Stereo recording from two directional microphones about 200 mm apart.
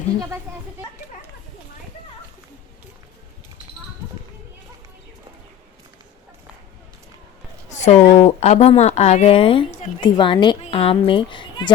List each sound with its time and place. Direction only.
7.7 s speech: 35° left (ahead or behind)